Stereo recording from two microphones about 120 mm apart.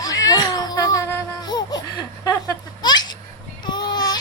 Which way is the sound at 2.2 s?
30° left (ahead or behind).